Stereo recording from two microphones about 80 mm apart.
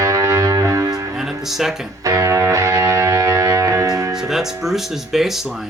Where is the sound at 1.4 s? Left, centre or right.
Centre.